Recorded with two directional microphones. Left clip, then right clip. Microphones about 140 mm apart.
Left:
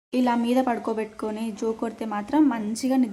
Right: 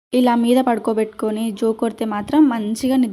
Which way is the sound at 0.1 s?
30° right (ahead or behind).